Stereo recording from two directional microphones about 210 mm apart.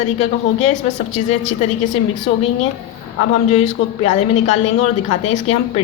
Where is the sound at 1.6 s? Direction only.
35° left (ahead or behind).